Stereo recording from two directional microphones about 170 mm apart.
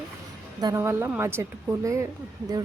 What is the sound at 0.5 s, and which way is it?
A woman's voice, 20° right (ahead or behind).